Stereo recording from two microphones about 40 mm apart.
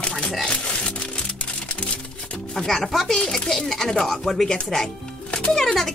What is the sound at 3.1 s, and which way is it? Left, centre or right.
Speech, centre.